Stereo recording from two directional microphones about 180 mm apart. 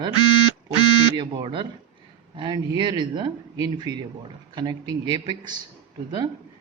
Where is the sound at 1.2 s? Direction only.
25° right (ahead or behind).